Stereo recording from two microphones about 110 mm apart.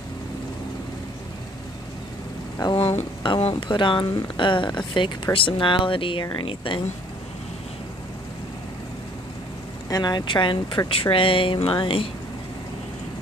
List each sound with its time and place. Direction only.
2.6 s speech: 45° left (ahead or behind)
9.8 s speech: 35° left (ahead or behind); by 12.1 s 50° left (ahead or behind)